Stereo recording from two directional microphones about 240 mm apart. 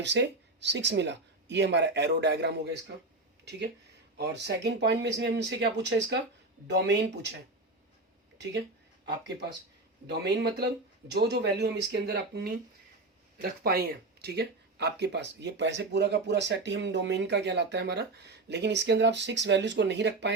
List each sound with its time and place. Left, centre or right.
0.0 s speech: right
4.2 s speech: right
10.1 s speech: right